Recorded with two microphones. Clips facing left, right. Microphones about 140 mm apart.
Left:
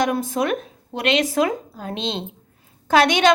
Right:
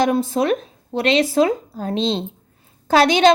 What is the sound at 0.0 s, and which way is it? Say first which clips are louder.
Speech: right 3 dB; 30° right (ahead or behind).